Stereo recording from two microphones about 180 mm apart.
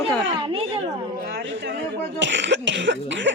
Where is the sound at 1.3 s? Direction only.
75° right (ahead or behind).